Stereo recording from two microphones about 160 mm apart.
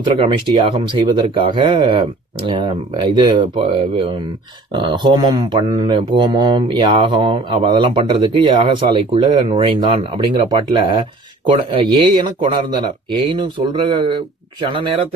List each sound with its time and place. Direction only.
0.1 s speech: 30° right (ahead or behind)